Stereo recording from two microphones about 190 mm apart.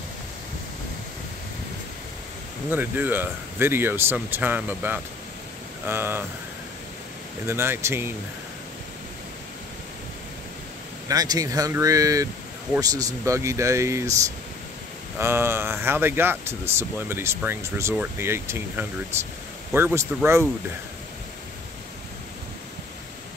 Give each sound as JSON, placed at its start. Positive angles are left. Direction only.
{"t": 2.7, "sound": "speech", "side_deg": -10}
{"t": 7.4, "sound": "speech", "side_deg": -15}
{"t": 11.1, "sound": "speech", "side_deg": -20}
{"t": 15.1, "sound": "speech", "side_deg": -10}